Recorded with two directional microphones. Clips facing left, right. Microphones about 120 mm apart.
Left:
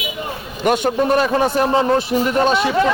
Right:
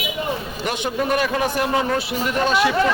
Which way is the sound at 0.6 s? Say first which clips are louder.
Left 9 dB; 50° left (ahead or behind).